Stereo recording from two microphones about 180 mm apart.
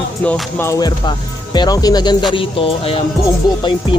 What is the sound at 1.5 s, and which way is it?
Speech, 20° left (ahead or behind).